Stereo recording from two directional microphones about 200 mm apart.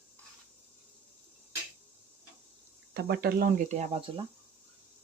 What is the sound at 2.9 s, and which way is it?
Speech, 50° right (ahead or behind).